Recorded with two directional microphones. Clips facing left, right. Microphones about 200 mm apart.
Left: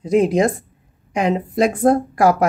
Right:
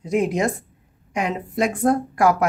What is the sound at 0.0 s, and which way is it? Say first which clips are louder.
Speech: left 5 dB; 35° left (ahead or behind).